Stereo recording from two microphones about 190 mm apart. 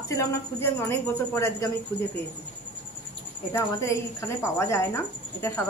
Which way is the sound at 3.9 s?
15° left (ahead or behind).